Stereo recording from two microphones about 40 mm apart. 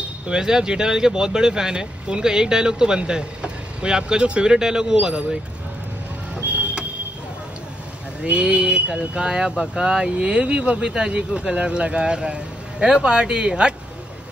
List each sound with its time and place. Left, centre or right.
0.3 s speech: centre
8.2 s speech: right